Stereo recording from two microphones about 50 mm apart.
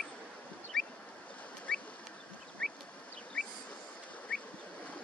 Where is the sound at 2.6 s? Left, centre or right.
Centre.